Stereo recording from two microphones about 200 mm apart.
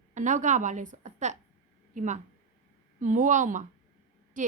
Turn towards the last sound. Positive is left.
turn(degrees=-40)  # may be behind; listen again after turning